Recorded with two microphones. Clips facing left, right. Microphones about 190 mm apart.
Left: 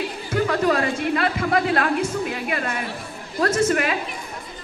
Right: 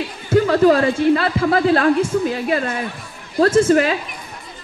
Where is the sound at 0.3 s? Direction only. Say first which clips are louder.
Right 8 dB; 30° right (ahead or behind).